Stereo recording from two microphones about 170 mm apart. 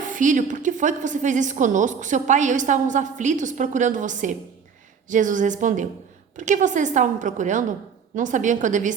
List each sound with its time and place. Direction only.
0.1 s a woman's voice: 50° right (ahead or behind)